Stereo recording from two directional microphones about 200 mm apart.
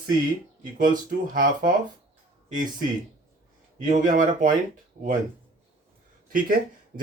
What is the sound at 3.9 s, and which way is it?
Speech, 40° right (ahead or behind).